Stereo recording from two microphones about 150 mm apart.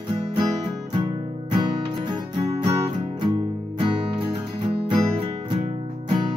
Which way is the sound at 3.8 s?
35° right (ahead or behind).